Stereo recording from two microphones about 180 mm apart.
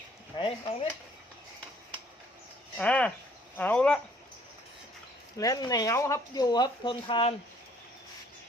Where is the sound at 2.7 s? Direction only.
5° left (ahead or behind).